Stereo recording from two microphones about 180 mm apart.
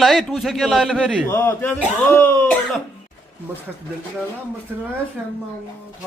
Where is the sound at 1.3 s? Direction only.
15° left (ahead or behind).